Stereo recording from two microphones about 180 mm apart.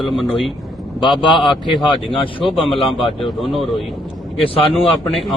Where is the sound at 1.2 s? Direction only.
25° left (ahead or behind).